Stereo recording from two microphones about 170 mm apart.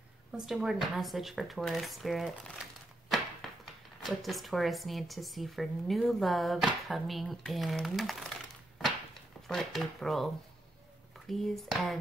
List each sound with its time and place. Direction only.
0.3 s speech: 5° right (ahead or behind)
3.1 s a sound: centre (ahead or behind)
4.0 s speech: centre (ahead or behind)
9.5 s speech: centre (ahead or behind)